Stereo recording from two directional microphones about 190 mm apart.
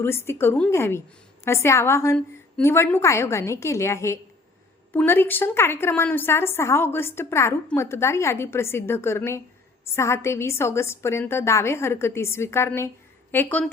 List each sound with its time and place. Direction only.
0.0 s a woman's voice: 15° left (ahead or behind)